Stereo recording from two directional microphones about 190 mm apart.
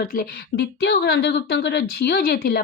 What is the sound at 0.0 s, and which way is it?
Speech, 50° left (ahead or behind).